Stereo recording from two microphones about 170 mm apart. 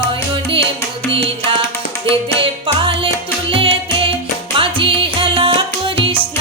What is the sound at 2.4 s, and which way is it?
Music, 30° right (ahead or behind).